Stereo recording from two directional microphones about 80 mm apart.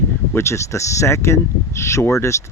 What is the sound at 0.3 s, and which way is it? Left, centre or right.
Speech, left.